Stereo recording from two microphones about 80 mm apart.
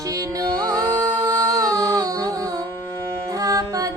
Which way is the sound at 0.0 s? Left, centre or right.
Right.